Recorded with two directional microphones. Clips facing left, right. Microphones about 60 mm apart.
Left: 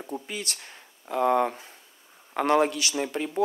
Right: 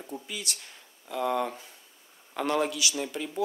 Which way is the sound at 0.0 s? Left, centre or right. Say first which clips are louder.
Left 4 dB; left.